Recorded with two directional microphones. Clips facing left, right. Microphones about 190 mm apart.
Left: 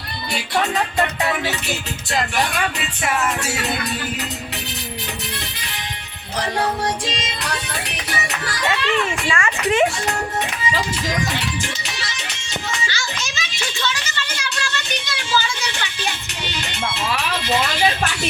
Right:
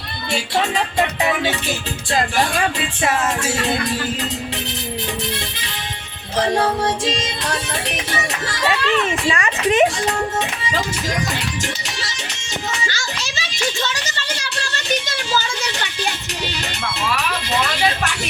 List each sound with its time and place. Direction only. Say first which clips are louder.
2.1 s speech: right 2 dB; 30° right (ahead or behind)
8.4 s a child's voice: right 2 dB; 20° right (ahead or behind)
13.2 s children playing: right 1 dB; 30° right (ahead or behind)
13.7 s a sound: right 1 dB; 40° right (ahead or behind)